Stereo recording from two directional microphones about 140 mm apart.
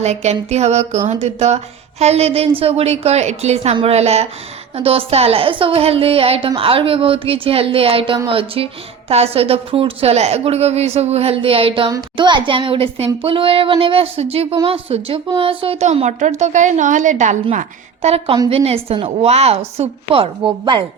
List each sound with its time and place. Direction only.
0.0 s a woman's voice: 50° right (ahead or behind)
11.9 s a woman's voice: 30° right (ahead or behind)
15.9 s a woman's voice: 60° right (ahead or behind)